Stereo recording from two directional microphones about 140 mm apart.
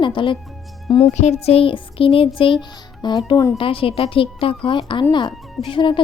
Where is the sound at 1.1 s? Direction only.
50° left (ahead or behind); by 3.5 s 30° left (ahead or behind).